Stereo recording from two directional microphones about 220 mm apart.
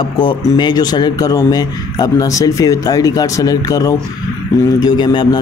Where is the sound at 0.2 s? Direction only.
20° left (ahead or behind).